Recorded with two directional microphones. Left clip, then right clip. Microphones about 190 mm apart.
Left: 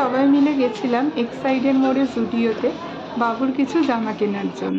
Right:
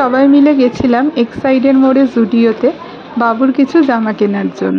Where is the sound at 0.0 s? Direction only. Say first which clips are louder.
Right 8 dB; 35° right (ahead or behind).